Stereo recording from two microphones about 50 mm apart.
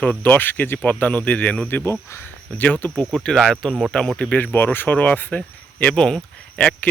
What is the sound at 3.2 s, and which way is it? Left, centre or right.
Speech, centre.